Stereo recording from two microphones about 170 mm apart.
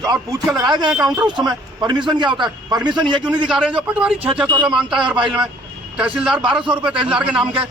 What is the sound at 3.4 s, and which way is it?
A man's voice, 5° right (ahead or behind).